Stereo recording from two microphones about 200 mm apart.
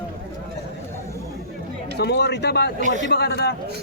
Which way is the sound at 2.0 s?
55° left (ahead or behind).